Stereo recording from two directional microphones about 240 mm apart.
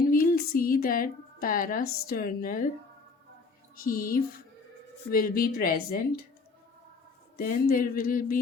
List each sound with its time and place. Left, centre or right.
0.1 s a woman's voice: left
3.8 s speech: left
7.3 s speech: left